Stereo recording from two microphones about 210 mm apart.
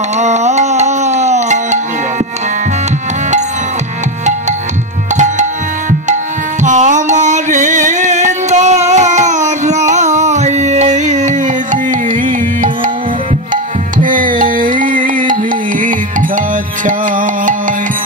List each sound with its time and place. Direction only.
0.2 s music: 35° right (ahead or behind)
5.1 s music: 35° right (ahead or behind)